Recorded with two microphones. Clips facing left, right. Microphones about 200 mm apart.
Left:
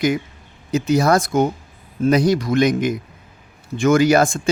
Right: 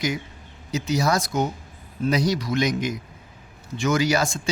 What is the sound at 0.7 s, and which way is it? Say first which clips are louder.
A man's voice: left 7 dB; 55° left (ahead or behind).